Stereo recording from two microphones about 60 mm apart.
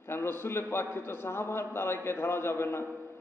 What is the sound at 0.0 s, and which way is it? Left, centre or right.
A man's voice, left.